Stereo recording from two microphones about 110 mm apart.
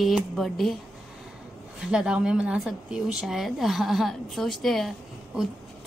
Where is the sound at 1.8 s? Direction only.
5° right (ahead or behind).